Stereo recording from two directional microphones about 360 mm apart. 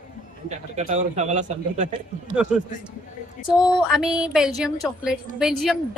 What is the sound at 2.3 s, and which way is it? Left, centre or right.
A woman's voice, centre.